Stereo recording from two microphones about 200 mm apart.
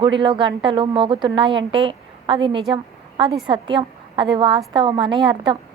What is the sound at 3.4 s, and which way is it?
A woman's voice, 25° right (ahead or behind).